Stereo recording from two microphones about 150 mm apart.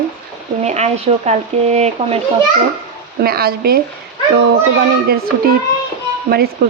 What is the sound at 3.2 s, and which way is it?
Speech, 90° right.